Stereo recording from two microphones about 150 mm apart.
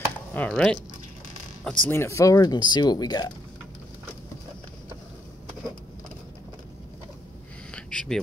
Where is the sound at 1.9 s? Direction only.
15° left (ahead or behind).